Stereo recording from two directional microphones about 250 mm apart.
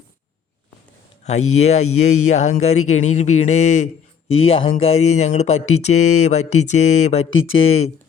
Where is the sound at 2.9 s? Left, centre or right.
Left.